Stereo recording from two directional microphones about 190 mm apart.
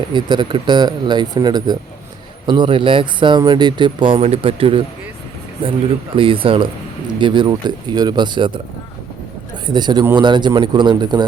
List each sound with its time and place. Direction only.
0.1 s speech: 25° right (ahead or behind)
6.1 s speech: 30° right (ahead or behind)
9.6 s speech: 20° right (ahead or behind)